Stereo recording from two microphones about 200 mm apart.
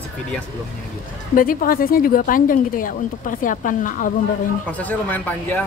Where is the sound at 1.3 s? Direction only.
45° left (ahead or behind).